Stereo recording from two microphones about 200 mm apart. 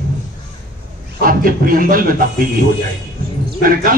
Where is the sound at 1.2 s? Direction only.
45° right (ahead or behind).